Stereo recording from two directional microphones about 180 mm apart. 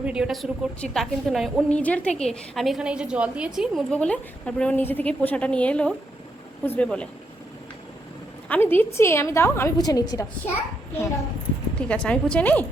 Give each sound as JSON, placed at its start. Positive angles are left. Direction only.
{"t": 0.0, "sound": "a woman's voice", "side_deg": -5}
{"t": 8.4, "sound": "a woman's voice", "side_deg": 10}
{"t": 11.7, "sound": "a woman's voice", "side_deg": 5}